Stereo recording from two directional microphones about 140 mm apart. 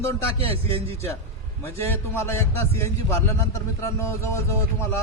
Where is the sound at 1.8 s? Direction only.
15° left (ahead or behind).